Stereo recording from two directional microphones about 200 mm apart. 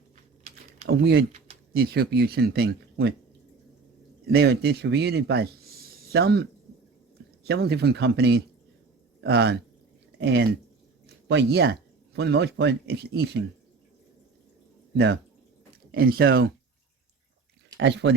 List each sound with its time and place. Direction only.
0.9 s speech: 50° right (ahead or behind)
4.3 s speech: 55° right (ahead or behind)
7.4 s speech: 55° right (ahead or behind)
14.9 s speech: 55° right (ahead or behind)
17.7 s speech: 60° right (ahead or behind)